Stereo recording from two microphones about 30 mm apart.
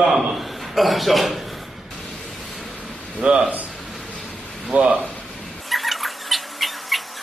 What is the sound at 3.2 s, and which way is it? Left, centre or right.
Speech, right.